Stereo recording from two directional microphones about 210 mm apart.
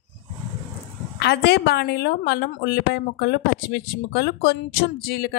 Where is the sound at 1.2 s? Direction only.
50° left (ahead or behind).